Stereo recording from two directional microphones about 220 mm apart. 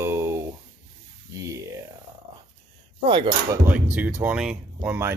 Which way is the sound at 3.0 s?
20° right (ahead or behind).